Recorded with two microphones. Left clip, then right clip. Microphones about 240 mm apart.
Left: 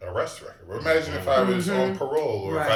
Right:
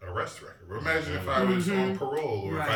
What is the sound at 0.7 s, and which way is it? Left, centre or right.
Speech, centre.